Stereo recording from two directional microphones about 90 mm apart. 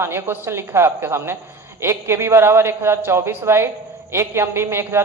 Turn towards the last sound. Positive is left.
turn(degrees=-30)  # may be behind; listen again after turning